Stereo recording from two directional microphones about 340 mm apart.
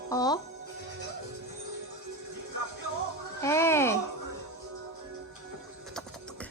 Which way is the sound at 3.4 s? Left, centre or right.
Centre.